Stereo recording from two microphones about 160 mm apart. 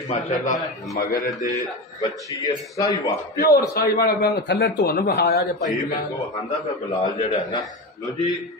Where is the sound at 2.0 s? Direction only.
25° left (ahead or behind).